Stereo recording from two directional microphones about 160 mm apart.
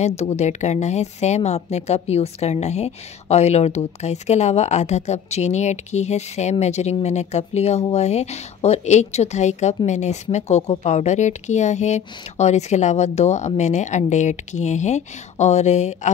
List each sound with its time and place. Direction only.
0.0 s a woman's voice: 40° left (ahead or behind)